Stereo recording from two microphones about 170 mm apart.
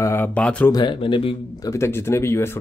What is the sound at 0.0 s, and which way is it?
Speech, 15° left (ahead or behind).